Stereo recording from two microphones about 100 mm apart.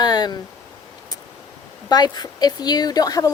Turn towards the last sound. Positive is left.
turn(degrees=35)  # may be behind; listen again after turning